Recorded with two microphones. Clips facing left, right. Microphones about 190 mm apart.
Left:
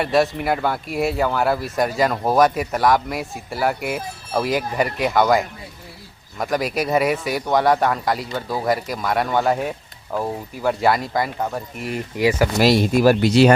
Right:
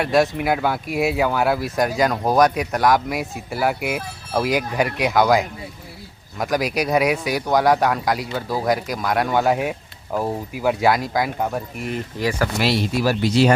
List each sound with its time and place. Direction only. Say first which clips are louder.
0.0 s speech: even; centre (ahead or behind)
12.1 s speech: left 5 dB; 10° left (ahead or behind)
12.5 s speech: left 5 dB; 45° left (ahead or behind); by 13.5 s 70° left (ahead or behind)